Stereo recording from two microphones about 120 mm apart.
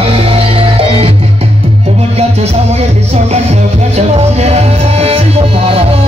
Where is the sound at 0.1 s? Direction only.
55° right (ahead or behind).